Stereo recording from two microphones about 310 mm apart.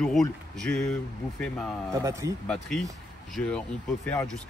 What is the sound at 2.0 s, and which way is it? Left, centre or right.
Speech, centre.